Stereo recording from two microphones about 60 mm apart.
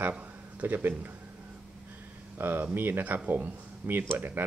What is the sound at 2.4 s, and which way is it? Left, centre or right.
Speech, right.